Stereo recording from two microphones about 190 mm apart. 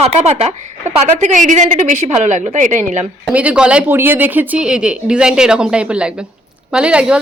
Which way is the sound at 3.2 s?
5° right (ahead or behind).